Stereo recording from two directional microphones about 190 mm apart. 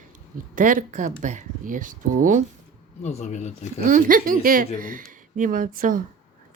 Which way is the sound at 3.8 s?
45° right (ahead or behind).